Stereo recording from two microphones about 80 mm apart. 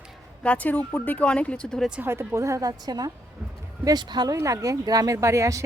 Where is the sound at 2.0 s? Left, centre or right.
Right.